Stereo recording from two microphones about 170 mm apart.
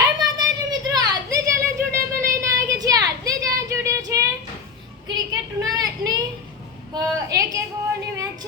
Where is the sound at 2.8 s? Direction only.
20° right (ahead or behind).